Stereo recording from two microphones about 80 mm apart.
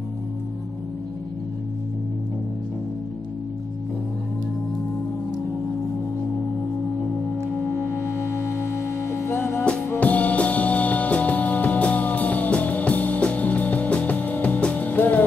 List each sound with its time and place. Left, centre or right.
7.6 s music: left
9.9 s music: centre